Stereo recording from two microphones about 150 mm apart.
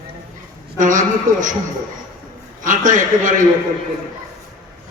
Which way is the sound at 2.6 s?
60° right (ahead or behind).